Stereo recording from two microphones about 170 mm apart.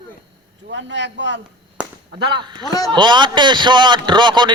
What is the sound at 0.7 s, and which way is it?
Speech, 90° right.